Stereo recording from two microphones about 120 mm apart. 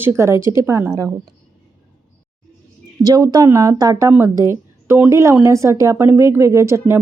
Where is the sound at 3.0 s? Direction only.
30° right (ahead or behind).